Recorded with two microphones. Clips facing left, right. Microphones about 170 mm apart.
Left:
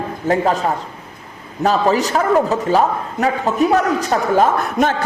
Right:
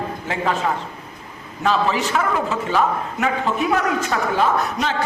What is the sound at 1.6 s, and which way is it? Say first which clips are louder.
A man's voice: left 4 dB; 40° left (ahead or behind).